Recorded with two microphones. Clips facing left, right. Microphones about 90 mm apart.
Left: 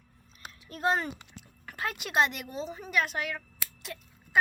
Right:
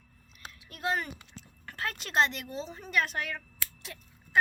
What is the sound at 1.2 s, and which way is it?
A woman's voice, 10° left (ahead or behind).